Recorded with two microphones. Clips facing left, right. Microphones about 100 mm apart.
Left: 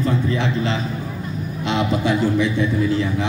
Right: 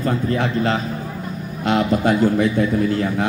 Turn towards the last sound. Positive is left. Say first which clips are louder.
# right 1 dB
turn(degrees=-50)  # may be behind; listen again after turning